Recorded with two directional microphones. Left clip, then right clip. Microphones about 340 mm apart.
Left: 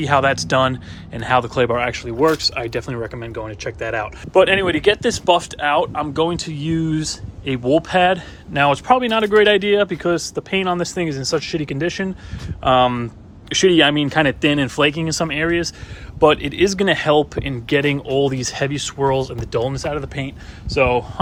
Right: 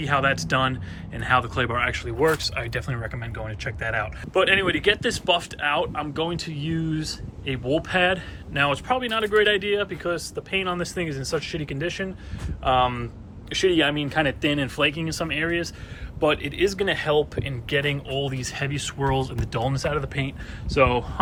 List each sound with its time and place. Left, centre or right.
0.0 s speech: centre